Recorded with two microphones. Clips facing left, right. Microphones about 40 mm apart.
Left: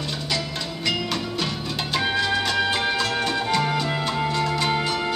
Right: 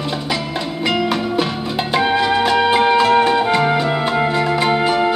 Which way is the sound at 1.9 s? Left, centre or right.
Right.